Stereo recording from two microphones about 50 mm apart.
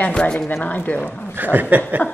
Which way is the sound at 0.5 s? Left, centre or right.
Left.